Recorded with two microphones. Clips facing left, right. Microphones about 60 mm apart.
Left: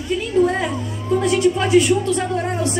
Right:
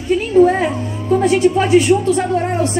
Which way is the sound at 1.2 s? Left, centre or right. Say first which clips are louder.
Right 4 dB; right.